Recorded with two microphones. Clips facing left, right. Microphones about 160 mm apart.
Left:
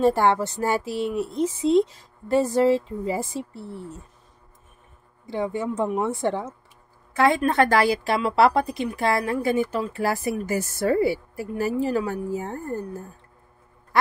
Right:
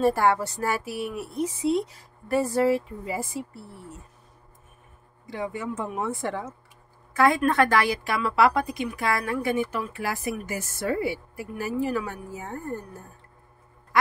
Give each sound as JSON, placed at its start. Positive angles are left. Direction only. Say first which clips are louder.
{"t": 0.0, "sound": "a woman's voice", "louder": "left 2 dB", "side_deg": 25}
{"t": 5.2, "sound": "a woman's voice", "louder": "left 5 dB", "side_deg": 30}